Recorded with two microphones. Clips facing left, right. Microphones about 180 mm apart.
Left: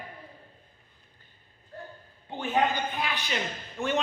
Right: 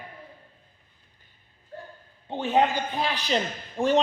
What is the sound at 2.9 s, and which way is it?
Speech, 35° right (ahead or behind).